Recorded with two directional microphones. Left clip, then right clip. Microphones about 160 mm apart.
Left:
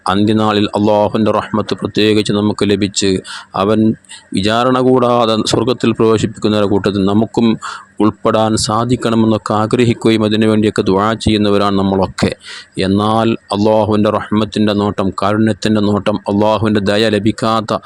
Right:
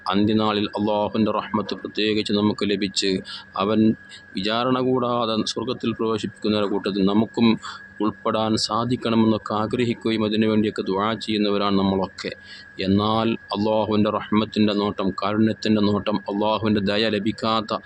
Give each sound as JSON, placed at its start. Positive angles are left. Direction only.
{"t": 0.3, "sound": "speech", "side_deg": 50}